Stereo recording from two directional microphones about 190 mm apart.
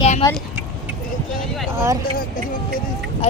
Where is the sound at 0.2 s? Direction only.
20° left (ahead or behind).